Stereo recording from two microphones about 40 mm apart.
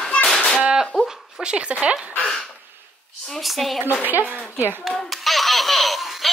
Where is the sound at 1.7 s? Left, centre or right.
Right.